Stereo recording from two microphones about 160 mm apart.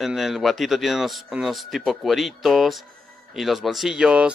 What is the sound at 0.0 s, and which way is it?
Speech, centre (ahead or behind).